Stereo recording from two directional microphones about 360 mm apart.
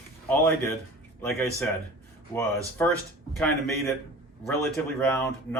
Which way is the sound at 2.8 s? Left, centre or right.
Centre.